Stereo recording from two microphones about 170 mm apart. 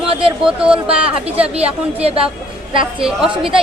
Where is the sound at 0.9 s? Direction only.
35° right (ahead or behind).